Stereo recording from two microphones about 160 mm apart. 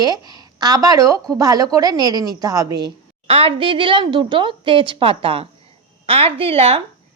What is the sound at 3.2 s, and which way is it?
A woman's voice, 35° right (ahead or behind).